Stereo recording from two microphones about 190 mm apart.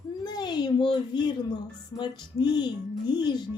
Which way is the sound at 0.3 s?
20° left (ahead or behind).